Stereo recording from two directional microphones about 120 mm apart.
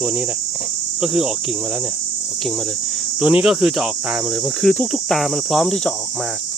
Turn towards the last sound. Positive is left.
turn(degrees=0)  # may be behind; listen again after turning